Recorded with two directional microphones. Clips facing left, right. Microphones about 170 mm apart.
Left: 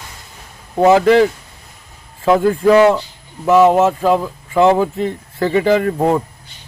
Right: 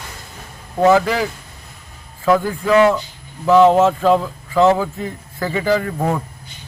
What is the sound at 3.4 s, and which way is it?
Speech, 10° left (ahead or behind).